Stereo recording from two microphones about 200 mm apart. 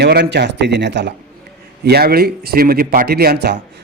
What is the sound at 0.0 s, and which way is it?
A man's voice, 55° right (ahead or behind).